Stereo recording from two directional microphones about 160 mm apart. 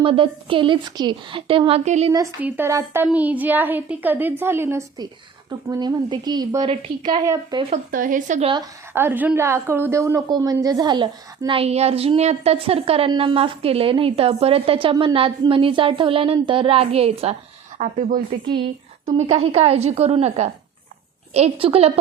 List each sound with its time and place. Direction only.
0.0 s a woman's voice: 35° right (ahead or behind)
1.8 s a woman's voice: 45° right (ahead or behind)
2.4 s a woman's voice: 15° right (ahead or behind)
7.7 s a woman's voice: 55° right (ahead or behind)
8.9 s a woman's voice: 15° right (ahead or behind); by 17.3 s 40° right (ahead or behind)
17.7 s a woman's voice: 55° right (ahead or behind)
19.0 s a woman's voice: 40° right (ahead or behind)